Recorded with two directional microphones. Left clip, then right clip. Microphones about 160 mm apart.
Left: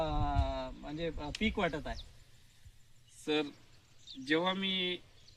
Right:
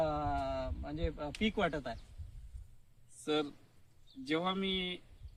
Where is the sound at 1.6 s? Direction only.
10° right (ahead or behind).